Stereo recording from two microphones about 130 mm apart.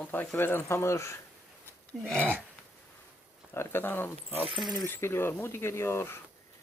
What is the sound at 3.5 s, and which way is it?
Speech, 15° left (ahead or behind).